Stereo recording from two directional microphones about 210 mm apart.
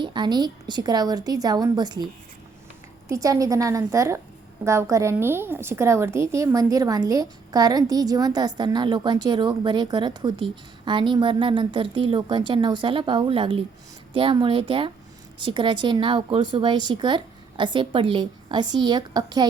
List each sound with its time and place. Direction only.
0.0 s a woman's voice: 20° right (ahead or behind)
3.1 s a woman's voice: 15° right (ahead or behind)